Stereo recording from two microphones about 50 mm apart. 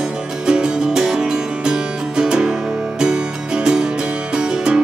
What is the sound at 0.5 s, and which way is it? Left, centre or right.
Music, centre.